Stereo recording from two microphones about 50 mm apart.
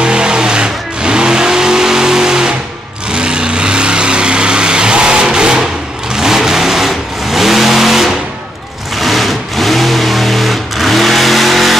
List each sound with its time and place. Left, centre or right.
0.0 s vehicle: centre